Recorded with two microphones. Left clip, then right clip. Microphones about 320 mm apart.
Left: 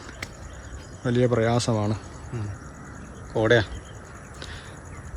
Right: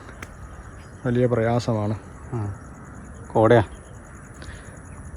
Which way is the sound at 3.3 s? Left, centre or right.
Centre.